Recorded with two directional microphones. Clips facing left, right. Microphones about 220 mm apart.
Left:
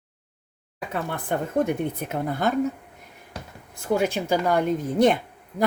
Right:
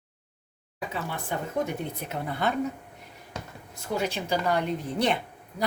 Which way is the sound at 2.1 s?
45° left (ahead or behind).